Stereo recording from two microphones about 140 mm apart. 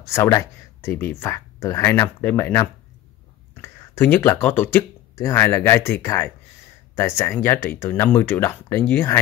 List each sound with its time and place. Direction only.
0.1 s speech: 20° left (ahead or behind)